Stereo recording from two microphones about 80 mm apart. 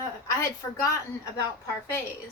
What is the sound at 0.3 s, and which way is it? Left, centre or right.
Speech, left.